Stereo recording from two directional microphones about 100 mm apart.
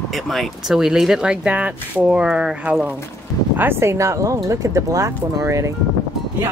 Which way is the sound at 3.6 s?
25° right (ahead or behind).